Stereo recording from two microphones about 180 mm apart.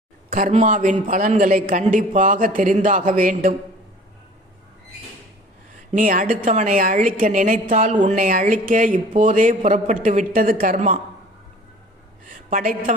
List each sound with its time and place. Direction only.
0.3 s speech: 45° right (ahead or behind)
5.9 s speech: 50° right (ahead or behind)
12.2 s a sound: 50° right (ahead or behind)